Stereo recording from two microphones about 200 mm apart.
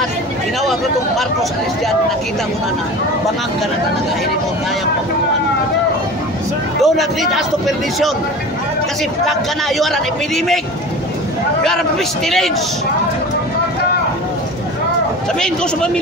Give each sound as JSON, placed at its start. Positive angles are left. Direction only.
{"t": 0.6, "sound": "speech", "side_deg": 0}
{"t": 6.8, "sound": "a man's voice", "side_deg": 0}
{"t": 9.2, "sound": "a man's voice", "side_deg": 0}
{"t": 12.3, "sound": "a man's voice", "side_deg": 0}
{"t": 15.3, "sound": "a man's voice", "side_deg": 5}